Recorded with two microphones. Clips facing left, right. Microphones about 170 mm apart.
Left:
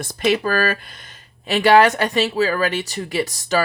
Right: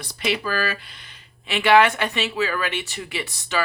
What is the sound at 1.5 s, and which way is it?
Speech, 40° left (ahead or behind).